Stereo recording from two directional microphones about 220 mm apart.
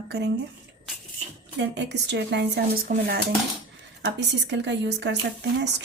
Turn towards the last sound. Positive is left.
turn(degrees=-50)  # may be behind; listen again after turning